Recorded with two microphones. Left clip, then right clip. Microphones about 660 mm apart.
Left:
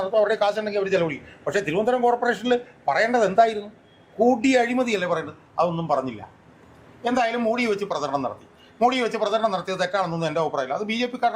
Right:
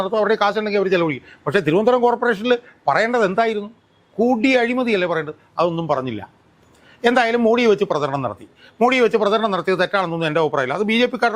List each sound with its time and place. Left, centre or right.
0.0 s a man's voice: right
7.0 s a man's voice: right